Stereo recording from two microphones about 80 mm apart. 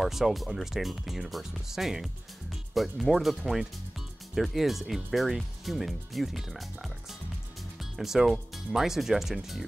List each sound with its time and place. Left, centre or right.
0.0 s speech: centre
8.0 s speech: centre